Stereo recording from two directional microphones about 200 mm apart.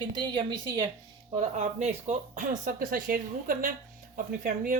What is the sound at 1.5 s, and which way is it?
Speech, 35° right (ahead or behind).